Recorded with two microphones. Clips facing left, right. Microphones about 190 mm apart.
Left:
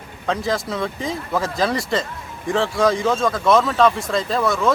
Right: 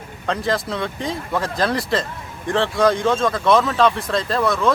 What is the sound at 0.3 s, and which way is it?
Speech, centre (ahead or behind).